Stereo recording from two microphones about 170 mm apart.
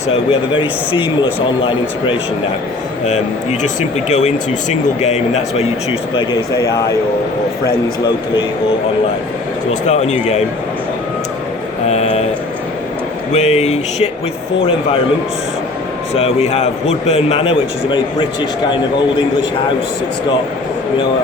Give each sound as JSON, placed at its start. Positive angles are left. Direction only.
{"t": 0.1, "sound": "a man's voice", "side_deg": 30}
{"t": 3.6, "sound": "speech", "side_deg": 45}
{"t": 6.1, "sound": "a man's voice", "side_deg": 20}
{"t": 9.8, "sound": "speech", "side_deg": 40}
{"t": 11.9, "sound": "a sound", "side_deg": 40}
{"t": 13.3, "sound": "speech", "side_deg": 40}
{"t": 16.1, "sound": "speech", "side_deg": 35}